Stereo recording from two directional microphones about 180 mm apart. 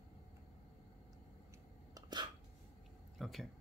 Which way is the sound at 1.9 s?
25° right (ahead or behind).